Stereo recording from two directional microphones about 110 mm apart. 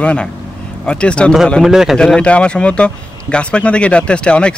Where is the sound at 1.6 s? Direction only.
5° right (ahead or behind).